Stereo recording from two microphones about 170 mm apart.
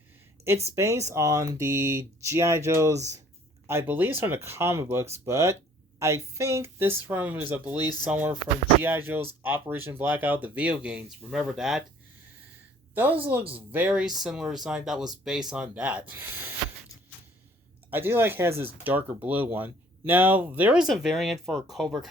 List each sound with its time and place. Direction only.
0.4 s speech: 15° right (ahead or behind)
12.9 s speech: 10° right (ahead or behind)
17.9 s speech: 10° right (ahead or behind)